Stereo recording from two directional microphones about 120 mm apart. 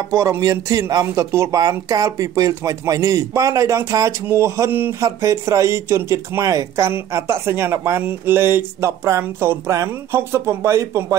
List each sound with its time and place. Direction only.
0.1 s speech: 25° right (ahead or behind)